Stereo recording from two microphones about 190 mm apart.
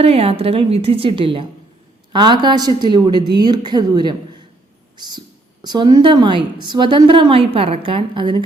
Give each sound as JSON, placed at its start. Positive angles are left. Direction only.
{"t": 0.0, "sound": "a woman's voice", "side_deg": -30}
{"t": 4.9, "sound": "a sound", "side_deg": -20}
{"t": 5.6, "sound": "a woman's voice", "side_deg": -25}